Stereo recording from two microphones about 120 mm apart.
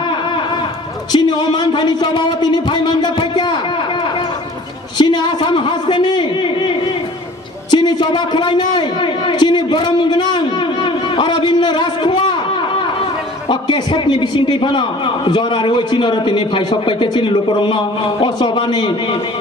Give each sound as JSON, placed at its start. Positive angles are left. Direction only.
{"t": 1.1, "sound": "speech", "side_deg": 40}
{"t": 4.9, "sound": "a man's voice", "side_deg": 35}
{"t": 13.5, "sound": "a man's voice", "side_deg": 40}